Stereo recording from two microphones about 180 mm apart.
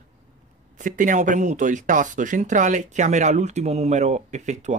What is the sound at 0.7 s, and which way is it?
Speech, 45° right (ahead or behind).